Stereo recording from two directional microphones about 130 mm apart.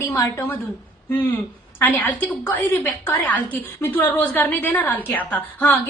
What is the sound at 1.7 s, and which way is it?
A woman's voice, 15° left (ahead or behind).